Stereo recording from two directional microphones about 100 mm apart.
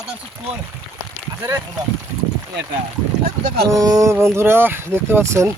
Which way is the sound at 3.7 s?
35° right (ahead or behind).